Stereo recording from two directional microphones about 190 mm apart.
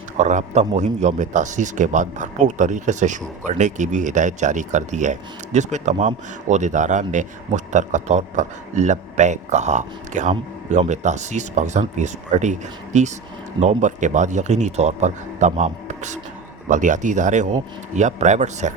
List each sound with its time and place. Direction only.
0.2 s speech: 40° right (ahead or behind)